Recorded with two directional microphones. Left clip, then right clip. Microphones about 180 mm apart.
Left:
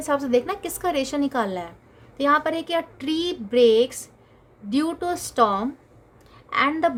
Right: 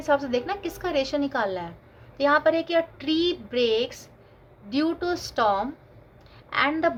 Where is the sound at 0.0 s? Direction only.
60° left (ahead or behind).